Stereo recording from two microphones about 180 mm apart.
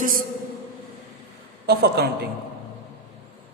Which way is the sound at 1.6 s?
60° right (ahead or behind).